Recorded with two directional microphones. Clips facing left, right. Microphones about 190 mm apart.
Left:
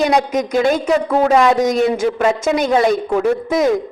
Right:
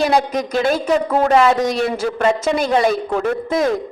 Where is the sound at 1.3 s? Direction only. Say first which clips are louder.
Even; 5° right (ahead or behind).